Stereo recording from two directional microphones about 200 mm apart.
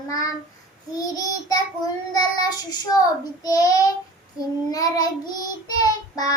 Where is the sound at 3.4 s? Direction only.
20° left (ahead or behind).